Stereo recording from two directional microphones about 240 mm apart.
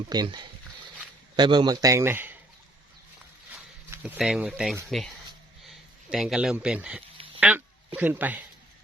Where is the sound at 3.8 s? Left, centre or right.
Centre.